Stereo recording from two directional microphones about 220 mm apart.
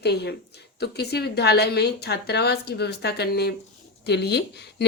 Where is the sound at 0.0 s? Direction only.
50° left (ahead or behind).